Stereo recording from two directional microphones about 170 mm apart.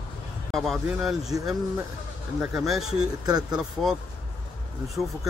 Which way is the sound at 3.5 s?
5° right (ahead or behind).